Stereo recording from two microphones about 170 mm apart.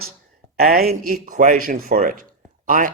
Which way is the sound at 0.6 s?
60° right (ahead or behind).